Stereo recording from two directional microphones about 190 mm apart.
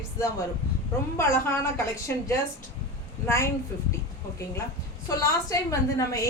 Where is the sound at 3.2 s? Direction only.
15° left (ahead or behind).